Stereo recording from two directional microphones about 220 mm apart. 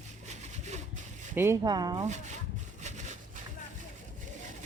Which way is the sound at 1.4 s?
15° right (ahead or behind).